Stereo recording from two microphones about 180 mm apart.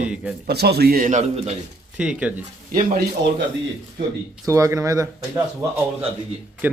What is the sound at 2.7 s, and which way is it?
Speech, 50° right (ahead or behind).